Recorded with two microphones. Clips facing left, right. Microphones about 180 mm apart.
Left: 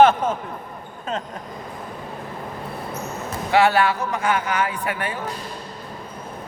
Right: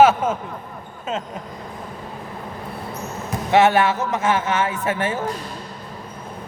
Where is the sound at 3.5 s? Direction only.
20° right (ahead or behind).